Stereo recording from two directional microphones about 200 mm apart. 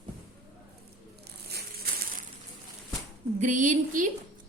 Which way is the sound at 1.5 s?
50° right (ahead or behind).